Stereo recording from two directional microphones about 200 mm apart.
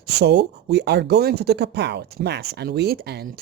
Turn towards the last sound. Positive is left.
turn(degrees=-50)  # may be behind; listen again after turning